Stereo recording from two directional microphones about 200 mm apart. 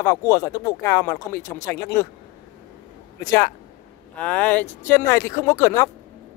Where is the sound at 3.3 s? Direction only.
20° left (ahead or behind).